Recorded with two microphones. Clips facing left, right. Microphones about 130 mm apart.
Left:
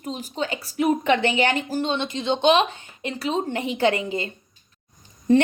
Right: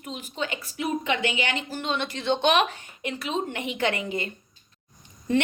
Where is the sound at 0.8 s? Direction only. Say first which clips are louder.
Left 7 dB; 50° left (ahead or behind).